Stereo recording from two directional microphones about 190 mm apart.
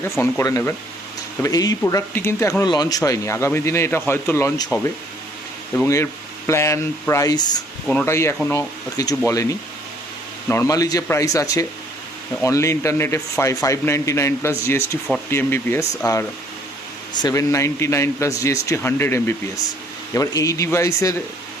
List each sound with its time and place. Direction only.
0.2 s speech: 15° left (ahead or behind)
6.5 s speech: 15° left (ahead or behind)
7.9 s speech: 10° left (ahead or behind)